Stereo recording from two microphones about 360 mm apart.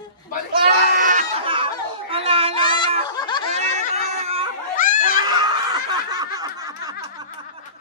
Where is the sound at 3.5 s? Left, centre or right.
Centre.